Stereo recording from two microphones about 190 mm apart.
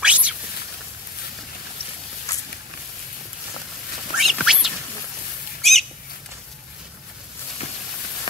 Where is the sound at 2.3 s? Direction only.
15° left (ahead or behind).